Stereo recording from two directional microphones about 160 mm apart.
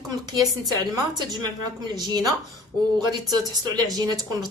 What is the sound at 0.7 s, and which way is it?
Speech, 25° right (ahead or behind).